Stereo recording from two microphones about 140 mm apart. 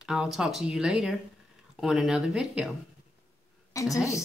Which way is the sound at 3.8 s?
25° left (ahead or behind).